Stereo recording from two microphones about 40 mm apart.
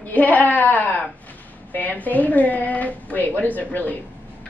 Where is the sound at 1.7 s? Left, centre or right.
Left.